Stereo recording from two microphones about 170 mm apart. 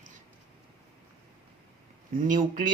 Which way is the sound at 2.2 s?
50° right (ahead or behind).